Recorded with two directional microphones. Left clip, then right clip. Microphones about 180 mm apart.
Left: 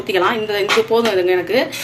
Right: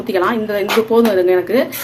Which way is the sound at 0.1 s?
20° right (ahead or behind).